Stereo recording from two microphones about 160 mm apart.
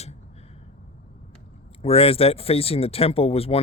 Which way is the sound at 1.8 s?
35° left (ahead or behind).